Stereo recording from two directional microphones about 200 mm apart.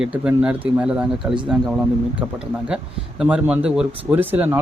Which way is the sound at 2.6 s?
5° right (ahead or behind).